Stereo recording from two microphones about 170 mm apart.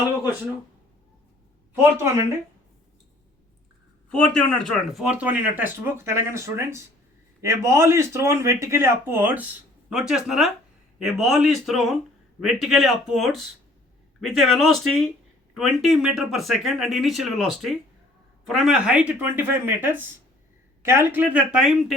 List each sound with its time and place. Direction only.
4.1 s speech: 5° left (ahead or behind)